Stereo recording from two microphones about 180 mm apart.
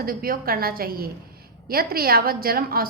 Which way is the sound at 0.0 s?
55° right (ahead or behind).